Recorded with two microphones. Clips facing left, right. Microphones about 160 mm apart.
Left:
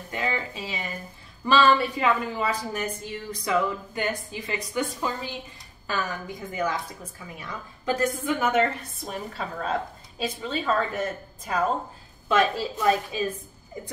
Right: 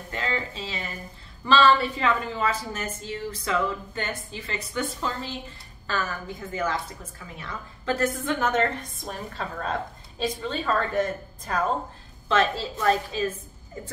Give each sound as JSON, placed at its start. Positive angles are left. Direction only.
{"t": 0.1, "sound": "a woman's voice", "side_deg": 15}